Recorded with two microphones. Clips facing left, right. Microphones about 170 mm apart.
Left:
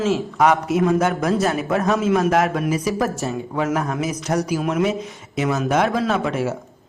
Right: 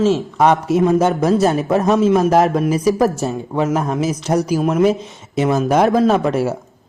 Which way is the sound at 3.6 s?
25° right (ahead or behind).